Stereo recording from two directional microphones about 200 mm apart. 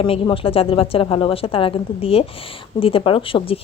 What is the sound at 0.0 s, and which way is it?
A woman's voice, 25° left (ahead or behind).